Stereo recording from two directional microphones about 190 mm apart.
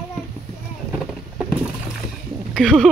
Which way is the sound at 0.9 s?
Centre (ahead or behind).